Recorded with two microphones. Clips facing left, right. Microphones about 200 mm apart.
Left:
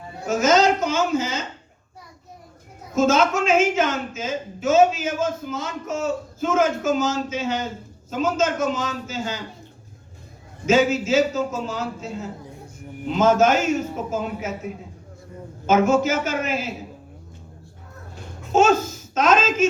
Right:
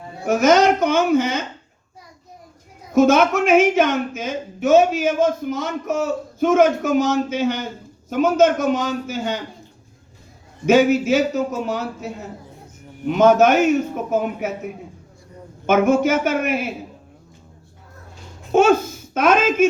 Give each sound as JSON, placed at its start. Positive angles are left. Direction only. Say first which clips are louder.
{"t": 0.3, "sound": "a woman's voice", "louder": "right 3 dB", "side_deg": -60}
{"t": 2.9, "sound": "a woman's voice", "louder": "right 4 dB", "side_deg": -60}
{"t": 10.7, "sound": "a woman's voice", "louder": "right 4 dB", "side_deg": -60}
{"t": 13.1, "sound": "a woman's voice", "louder": "right 4 dB", "side_deg": -65}
{"t": 18.5, "sound": "a woman's voice", "louder": "right 3 dB", "side_deg": -55}